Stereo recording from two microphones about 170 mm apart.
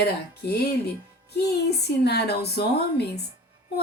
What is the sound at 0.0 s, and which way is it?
Speech, 70° left (ahead or behind).